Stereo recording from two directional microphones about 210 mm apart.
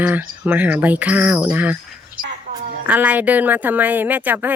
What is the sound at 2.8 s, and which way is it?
Speech, 5° right (ahead or behind).